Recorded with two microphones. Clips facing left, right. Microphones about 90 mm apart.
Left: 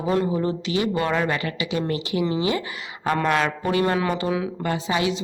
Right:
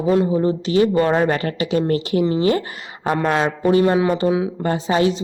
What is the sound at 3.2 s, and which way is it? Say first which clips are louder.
A woman's voice: right 4 dB; 30° right (ahead or behind).